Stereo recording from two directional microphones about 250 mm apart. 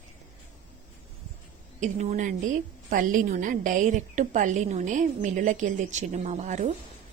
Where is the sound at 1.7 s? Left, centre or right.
Right.